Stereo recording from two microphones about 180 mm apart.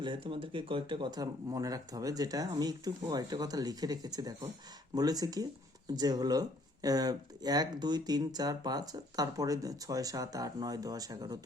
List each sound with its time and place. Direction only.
0.0 s speech: 30° right (ahead or behind)